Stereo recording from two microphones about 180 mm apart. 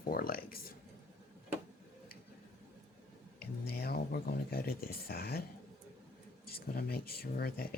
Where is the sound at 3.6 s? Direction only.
60° left (ahead or behind).